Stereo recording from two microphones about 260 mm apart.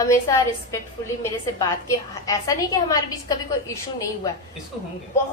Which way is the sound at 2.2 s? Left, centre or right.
Centre.